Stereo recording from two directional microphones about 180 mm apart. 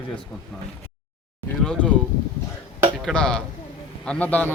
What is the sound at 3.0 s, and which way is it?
A man's voice, 5° left (ahead or behind).